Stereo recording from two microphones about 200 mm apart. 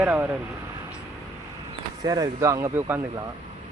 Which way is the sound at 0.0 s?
10° right (ahead or behind).